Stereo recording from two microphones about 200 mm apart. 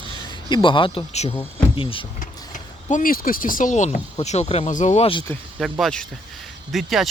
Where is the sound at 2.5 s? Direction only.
40° left (ahead or behind).